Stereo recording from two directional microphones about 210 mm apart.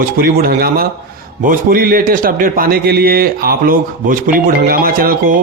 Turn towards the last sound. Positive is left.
turn(degrees=-45)  # may be behind; listen again after turning